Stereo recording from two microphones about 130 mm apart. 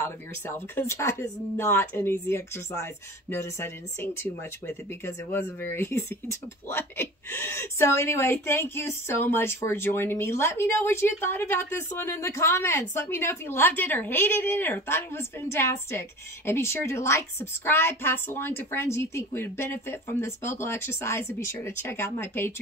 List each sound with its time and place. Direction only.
0.0 s a woman's voice: 20° left (ahead or behind)